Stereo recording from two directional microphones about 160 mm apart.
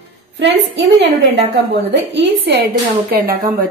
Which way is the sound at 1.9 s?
90° right.